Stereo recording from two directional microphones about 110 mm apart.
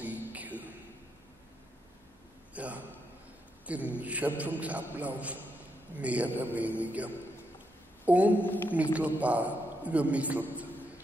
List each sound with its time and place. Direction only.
0.0 s a sound: 15° right (ahead or behind)
2.5 s a man's voice: 15° right (ahead or behind)
8.3 s a woman's voice: 15° left (ahead or behind)
8.9 s a man's voice: 15° right (ahead or behind)